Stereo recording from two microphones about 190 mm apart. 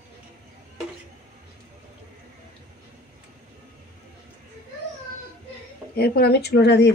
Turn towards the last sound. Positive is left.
turn(degrees=60)  # may be behind; listen again after turning